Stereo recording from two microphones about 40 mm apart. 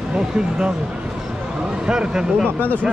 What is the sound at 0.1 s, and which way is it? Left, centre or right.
Speech, centre.